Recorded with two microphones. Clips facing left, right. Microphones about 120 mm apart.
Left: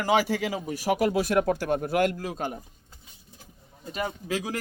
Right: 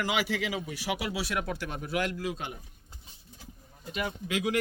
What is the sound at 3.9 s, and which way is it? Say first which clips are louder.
Speech: left 3 dB; 35° left (ahead or behind).